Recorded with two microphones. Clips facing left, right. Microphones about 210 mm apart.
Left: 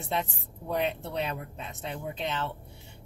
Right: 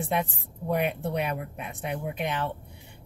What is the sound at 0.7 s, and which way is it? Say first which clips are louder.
Speech: right 3 dB; 15° right (ahead or behind).